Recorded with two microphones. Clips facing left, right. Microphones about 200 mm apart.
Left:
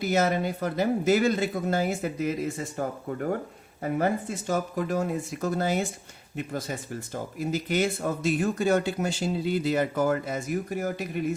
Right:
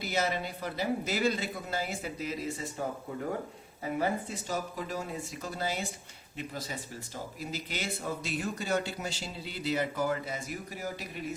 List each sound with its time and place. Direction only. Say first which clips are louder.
0.0 s speech: left 7 dB; 50° left (ahead or behind)
3.9 s speech: left 5 dB; 50° left (ahead or behind)